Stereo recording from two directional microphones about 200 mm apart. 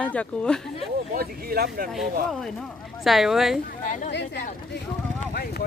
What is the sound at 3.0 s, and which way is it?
Speech, centre (ahead or behind).